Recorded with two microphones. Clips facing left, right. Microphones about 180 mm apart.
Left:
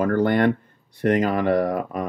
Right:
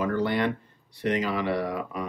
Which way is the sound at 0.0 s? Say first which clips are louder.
Left 6 dB; 50° left (ahead or behind).